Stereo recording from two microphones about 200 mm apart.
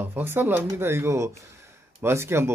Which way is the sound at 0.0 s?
10° right (ahead or behind).